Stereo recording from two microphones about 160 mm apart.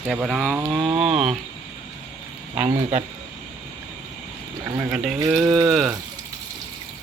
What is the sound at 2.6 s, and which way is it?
Speech, 45° right (ahead or behind).